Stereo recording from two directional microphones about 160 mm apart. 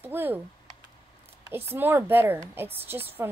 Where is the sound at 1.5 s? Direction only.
15° right (ahead or behind).